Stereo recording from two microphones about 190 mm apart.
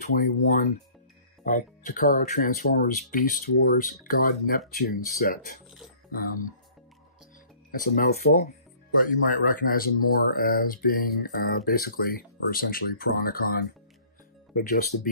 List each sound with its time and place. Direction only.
0.0 s speech: 45° left (ahead or behind)
7.7 s speech: 50° left (ahead or behind)